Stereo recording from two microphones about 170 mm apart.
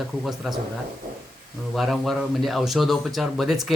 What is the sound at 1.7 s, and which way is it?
A man's voice, centre (ahead or behind).